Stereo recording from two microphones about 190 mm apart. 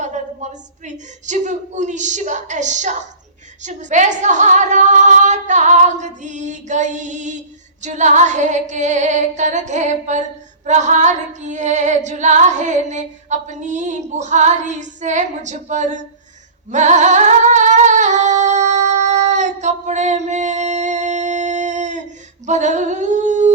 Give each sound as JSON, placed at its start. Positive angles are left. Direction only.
{"t": 0.0, "sound": "speech", "side_deg": -40}
{"t": 16.7, "sound": "singing", "side_deg": -40}
{"t": 22.4, "sound": "humming", "side_deg": -40}